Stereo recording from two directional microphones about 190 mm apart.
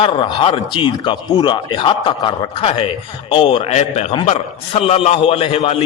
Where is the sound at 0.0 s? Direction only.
25° left (ahead or behind).